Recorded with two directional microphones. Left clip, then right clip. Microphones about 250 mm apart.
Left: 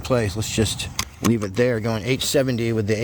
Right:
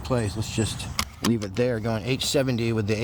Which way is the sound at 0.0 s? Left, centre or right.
Left.